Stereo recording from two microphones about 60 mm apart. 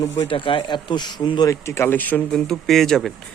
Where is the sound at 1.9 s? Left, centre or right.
Left.